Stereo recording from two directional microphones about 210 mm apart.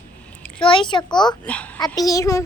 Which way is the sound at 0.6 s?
25° left (ahead or behind).